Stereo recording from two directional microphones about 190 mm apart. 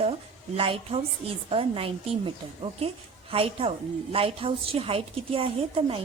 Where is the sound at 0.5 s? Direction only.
30° right (ahead or behind).